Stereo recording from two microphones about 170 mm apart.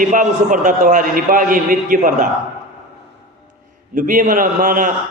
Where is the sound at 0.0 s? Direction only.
50° right (ahead or behind).